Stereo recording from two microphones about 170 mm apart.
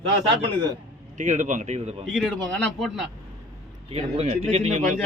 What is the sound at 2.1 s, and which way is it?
Speech, 5° left (ahead or behind).